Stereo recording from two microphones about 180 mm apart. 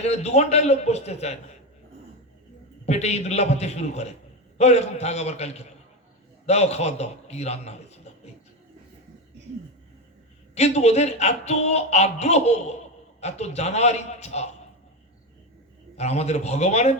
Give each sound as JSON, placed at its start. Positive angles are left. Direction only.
{"t": 0.0, "sound": "speech", "side_deg": 35}
{"t": 2.8, "sound": "a man's voice", "side_deg": 35}
{"t": 10.5, "sound": "speech", "side_deg": 35}
{"t": 16.0, "sound": "speech", "side_deg": 35}